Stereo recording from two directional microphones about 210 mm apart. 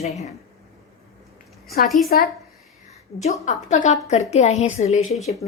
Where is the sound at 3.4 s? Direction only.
35° left (ahead or behind).